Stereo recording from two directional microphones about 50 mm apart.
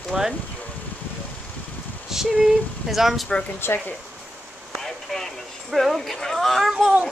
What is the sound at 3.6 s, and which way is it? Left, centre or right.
Speech, left.